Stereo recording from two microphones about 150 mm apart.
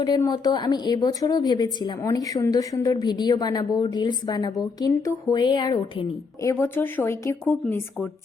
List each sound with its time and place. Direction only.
0.2 s a woman's voice: 25° left (ahead or behind)
7.4 s speech: 5° left (ahead or behind)